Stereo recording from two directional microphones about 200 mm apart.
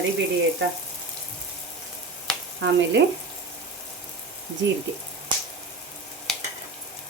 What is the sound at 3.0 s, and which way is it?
Speech, 65° right (ahead or behind).